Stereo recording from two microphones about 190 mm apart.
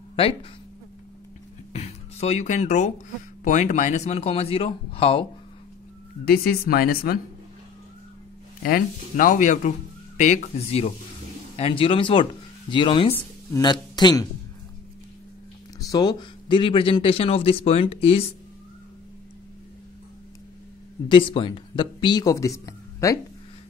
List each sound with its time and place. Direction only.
0.1 s speech: 30° left (ahead or behind)
1.7 s music: 35° left (ahead or behind)
3.4 s speech: 40° left (ahead or behind)
6.2 s speech: 50° left (ahead or behind)
8.6 s a man's voice: 50° left (ahead or behind); by 14.2 s 20° left (ahead or behind)
15.9 s speech: 20° left (ahead or behind)
21.1 s speech: 25° left (ahead or behind)